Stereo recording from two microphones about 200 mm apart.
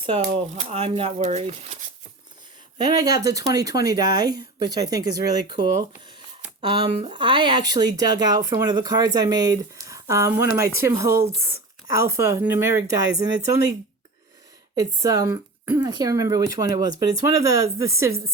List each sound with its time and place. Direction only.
0.0 s speech: 30° right (ahead or behind)
2.7 s speech: 20° right (ahead or behind)
14.8 s speech: 15° right (ahead or behind)